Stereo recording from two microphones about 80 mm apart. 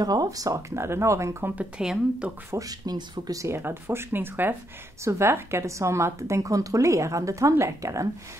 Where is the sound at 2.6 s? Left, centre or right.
Right.